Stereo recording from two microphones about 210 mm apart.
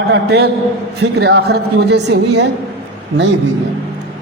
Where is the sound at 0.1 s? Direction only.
50° right (ahead or behind).